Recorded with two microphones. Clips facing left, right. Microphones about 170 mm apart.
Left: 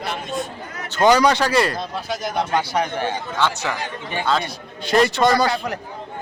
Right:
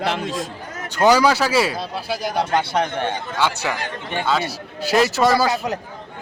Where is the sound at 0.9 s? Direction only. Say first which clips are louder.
Even; 10° right (ahead or behind).